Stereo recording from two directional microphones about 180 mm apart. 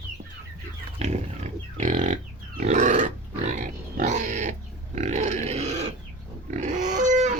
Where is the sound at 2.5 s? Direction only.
45° right (ahead or behind).